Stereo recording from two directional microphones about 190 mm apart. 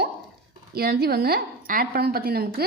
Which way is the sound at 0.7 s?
55° right (ahead or behind).